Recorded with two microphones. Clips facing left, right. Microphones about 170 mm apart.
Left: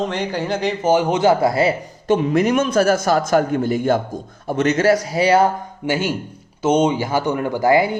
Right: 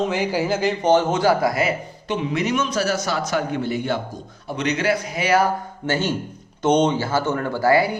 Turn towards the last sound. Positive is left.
turn(degrees=15)  # may be behind; listen again after turning